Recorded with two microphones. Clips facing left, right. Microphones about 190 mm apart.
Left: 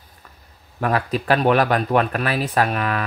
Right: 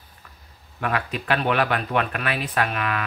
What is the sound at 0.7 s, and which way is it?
Speech, 40° left (ahead or behind).